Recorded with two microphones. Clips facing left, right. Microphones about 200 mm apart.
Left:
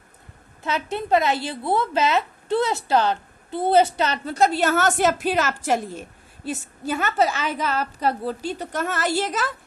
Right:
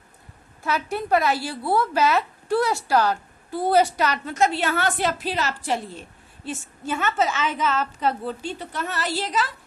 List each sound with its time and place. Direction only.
0.6 s a woman's voice: 20° left (ahead or behind); by 9.6 s 50° left (ahead or behind)